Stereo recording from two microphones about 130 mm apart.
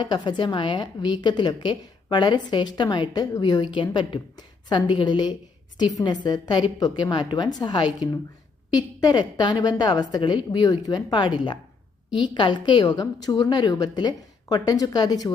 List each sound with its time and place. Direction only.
0.0 s a woman's voice: 35° left (ahead or behind)